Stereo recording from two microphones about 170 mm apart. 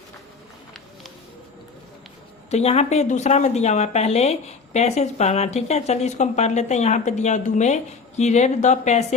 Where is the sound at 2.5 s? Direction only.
40° left (ahead or behind).